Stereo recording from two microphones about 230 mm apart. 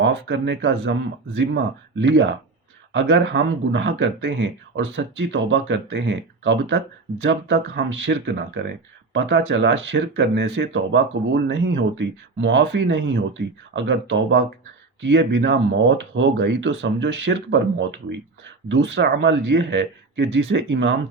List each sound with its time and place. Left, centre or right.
0.0 s speech: right